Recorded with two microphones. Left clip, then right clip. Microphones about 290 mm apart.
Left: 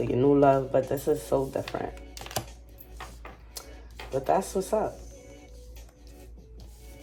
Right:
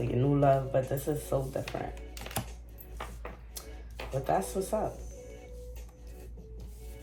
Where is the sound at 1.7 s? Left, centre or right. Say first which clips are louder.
Left 4 dB; left.